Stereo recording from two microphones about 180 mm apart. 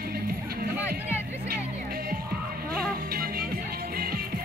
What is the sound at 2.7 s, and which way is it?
Music, 55° right (ahead or behind).